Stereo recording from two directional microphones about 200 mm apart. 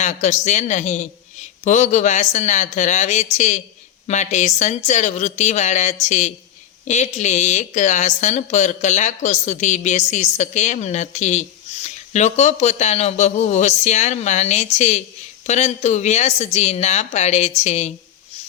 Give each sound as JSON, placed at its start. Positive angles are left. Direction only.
{"t": 0.0, "sound": "a woman's voice", "side_deg": 35}